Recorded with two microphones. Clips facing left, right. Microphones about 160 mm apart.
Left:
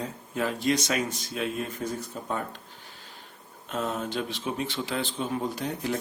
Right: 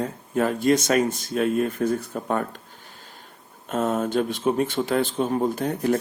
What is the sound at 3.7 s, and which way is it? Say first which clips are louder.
Speech: right 7 dB; 50° right (ahead or behind).